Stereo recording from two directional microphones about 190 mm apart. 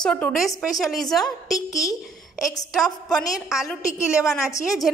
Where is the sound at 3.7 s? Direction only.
15° left (ahead or behind).